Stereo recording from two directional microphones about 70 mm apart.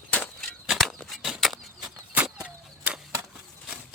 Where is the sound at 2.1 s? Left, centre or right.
Right.